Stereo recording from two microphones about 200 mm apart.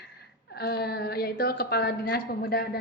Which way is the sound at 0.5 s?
55° left (ahead or behind).